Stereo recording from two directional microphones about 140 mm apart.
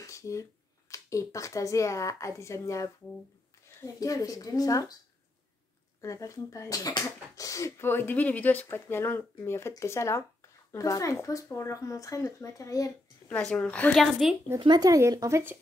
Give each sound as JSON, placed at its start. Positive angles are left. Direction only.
{"t": 0.0, "sound": "speech", "side_deg": 20}
{"t": 5.9, "sound": "speech", "side_deg": 20}
{"t": 13.3, "sound": "speech", "side_deg": 5}
{"t": 14.6, "sound": "speech", "side_deg": -30}